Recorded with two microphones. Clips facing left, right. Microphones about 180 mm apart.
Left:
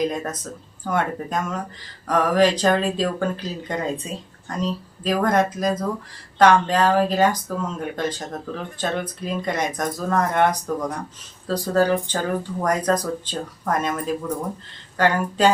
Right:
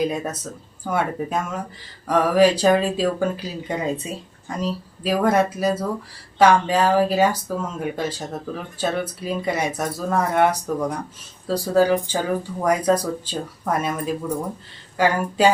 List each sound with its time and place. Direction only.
0.0 s speech: 10° right (ahead or behind)